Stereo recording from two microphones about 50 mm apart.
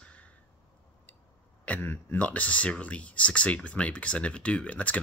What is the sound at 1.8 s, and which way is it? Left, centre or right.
Speech, left.